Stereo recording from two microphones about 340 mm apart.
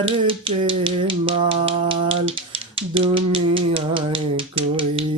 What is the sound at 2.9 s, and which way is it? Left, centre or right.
Rattle, centre.